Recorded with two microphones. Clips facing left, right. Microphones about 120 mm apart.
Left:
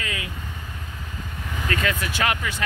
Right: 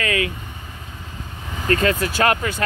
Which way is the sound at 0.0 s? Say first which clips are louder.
Right 10 dB; 75° right (ahead or behind).